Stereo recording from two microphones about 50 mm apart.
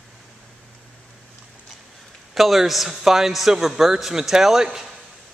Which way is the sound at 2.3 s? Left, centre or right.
Centre.